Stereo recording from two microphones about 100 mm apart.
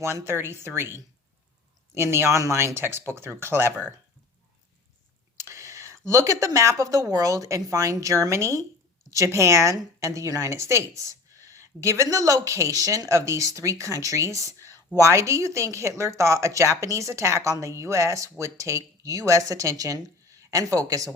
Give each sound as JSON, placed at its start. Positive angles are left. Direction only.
{"t": 0.0, "sound": "speech", "side_deg": -25}
{"t": 5.4, "sound": "a woman's voice", "side_deg": -30}